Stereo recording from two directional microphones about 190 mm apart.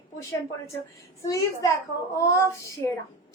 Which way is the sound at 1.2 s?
15° left (ahead or behind).